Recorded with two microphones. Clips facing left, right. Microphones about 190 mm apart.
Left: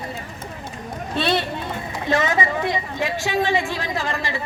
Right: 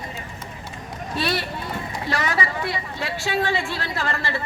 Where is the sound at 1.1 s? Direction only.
25° left (ahead or behind).